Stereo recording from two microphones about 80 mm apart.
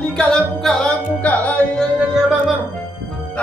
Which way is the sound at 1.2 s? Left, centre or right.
Centre.